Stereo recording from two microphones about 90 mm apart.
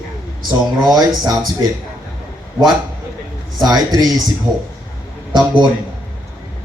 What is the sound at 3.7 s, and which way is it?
Speech, 45° right (ahead or behind).